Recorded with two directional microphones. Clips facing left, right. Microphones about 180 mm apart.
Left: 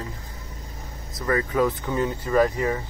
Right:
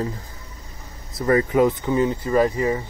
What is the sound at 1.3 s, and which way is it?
Speech, 25° right (ahead or behind).